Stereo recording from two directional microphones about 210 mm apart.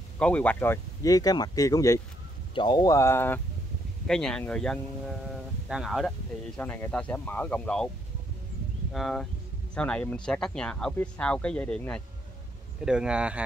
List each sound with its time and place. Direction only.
0.2 s speech: 5° left (ahead or behind)
8.9 s speech: centre (ahead or behind)